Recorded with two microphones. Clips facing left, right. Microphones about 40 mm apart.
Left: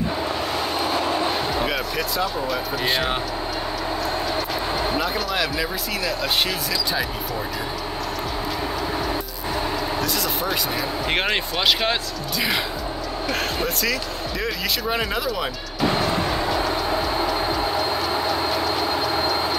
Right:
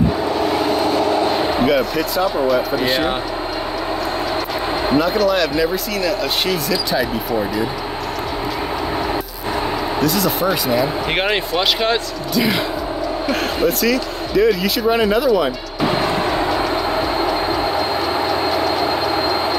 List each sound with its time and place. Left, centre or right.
0.4 s vehicle: centre
1.4 s basketball bounce: centre
1.7 s speech: centre
4.9 s speech: centre
9.9 s speech: centre
15.9 s vehicle: centre
16.3 s train: right